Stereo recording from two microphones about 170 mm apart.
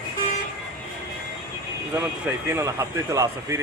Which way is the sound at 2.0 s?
15° right (ahead or behind).